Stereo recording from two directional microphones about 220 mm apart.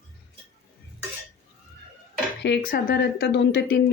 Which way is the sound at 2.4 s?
45° left (ahead or behind).